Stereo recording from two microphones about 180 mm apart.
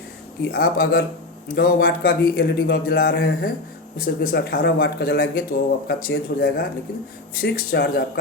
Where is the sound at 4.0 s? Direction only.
60° left (ahead or behind).